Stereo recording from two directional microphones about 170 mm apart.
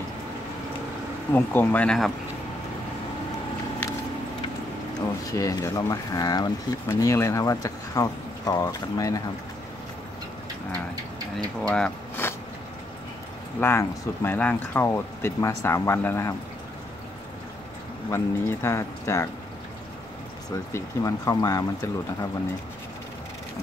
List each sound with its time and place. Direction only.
1.3 s speech: 10° left (ahead or behind)
5.3 s speech: 20° left (ahead or behind)
11.6 s speech: 5° left (ahead or behind)
13.6 s speech: 15° left (ahead or behind)
18.1 s speech: 15° left (ahead or behind)
20.5 s speech: 20° left (ahead or behind)